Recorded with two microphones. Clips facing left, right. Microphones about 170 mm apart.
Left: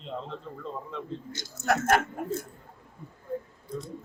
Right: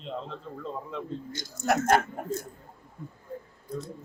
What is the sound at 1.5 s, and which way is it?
Speech, 15° right (ahead or behind).